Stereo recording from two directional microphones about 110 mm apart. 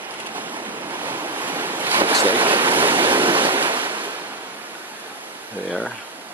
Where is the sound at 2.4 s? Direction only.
50° right (ahead or behind).